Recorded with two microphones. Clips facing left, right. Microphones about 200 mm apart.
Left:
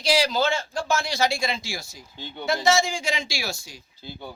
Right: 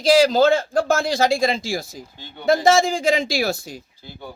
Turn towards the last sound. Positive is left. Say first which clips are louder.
# right 10 dB
turn(degrees=-55)  # may be behind; listen again after turning